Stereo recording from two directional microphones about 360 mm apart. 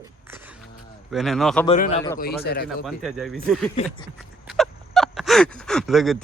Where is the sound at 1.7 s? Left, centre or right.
Centre.